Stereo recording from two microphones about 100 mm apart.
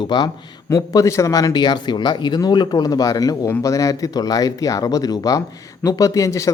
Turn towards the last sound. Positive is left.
turn(degrees=30)  # may be behind; listen again after turning